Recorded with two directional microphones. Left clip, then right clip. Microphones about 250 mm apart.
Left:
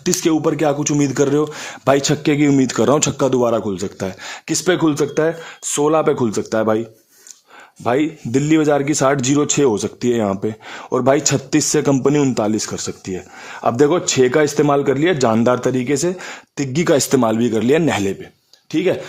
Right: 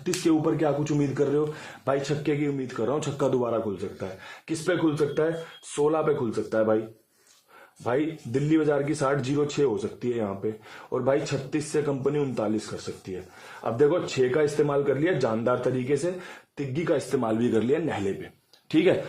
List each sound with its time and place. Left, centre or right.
0.1 s speech: left
3.5 s a man's voice: left
7.9 s a man's voice: left
18.7 s speech: centre